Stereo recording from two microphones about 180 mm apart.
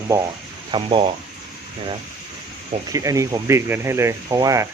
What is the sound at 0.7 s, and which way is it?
Speech, 30° right (ahead or behind).